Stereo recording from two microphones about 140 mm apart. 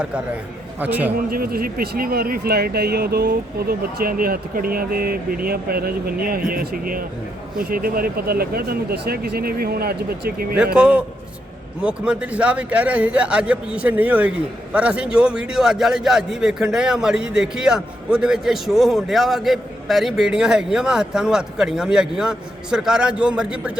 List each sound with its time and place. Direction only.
0.8 s a man's voice: 10° right (ahead or behind)
1.3 s speech: 90° right
10.8 s a man's voice: 5° right (ahead or behind)